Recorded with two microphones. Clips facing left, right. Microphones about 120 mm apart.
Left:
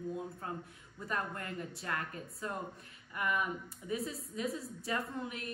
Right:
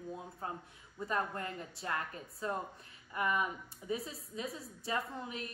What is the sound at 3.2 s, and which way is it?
Speech, 25° right (ahead or behind).